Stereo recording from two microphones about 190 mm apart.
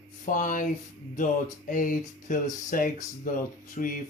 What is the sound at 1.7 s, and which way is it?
Speech, 45° left (ahead or behind).